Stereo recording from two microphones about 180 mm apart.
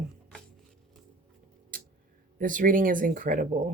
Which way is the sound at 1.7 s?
50° right (ahead or behind).